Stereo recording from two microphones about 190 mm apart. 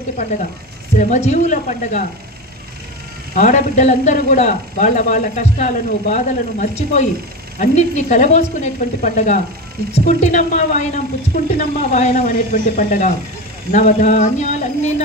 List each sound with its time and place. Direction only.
0.9 s a man's voice: 40° left (ahead or behind)
3.3 s a man's voice: 40° left (ahead or behind)